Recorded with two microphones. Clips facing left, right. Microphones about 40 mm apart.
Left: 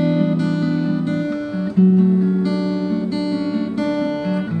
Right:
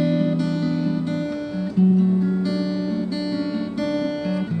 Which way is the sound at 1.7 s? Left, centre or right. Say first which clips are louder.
Left 4 dB; centre.